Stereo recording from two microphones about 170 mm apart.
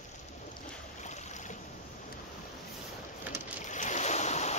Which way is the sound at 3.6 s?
45° left (ahead or behind).